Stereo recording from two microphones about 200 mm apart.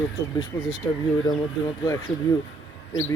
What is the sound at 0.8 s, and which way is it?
Speech, 10° left (ahead or behind).